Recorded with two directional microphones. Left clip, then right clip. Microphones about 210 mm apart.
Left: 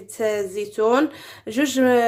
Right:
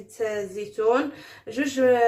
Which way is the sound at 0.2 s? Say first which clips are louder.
Left 5 dB; 45° left (ahead or behind).